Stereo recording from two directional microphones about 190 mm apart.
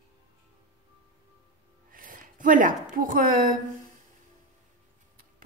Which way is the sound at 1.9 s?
45° right (ahead or behind).